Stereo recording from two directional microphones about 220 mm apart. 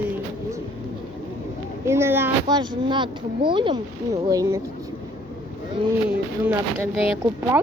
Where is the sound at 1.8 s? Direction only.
10° right (ahead or behind).